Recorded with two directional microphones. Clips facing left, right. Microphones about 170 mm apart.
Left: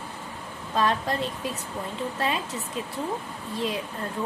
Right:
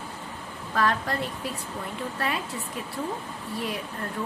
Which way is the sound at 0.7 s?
20° left (ahead or behind).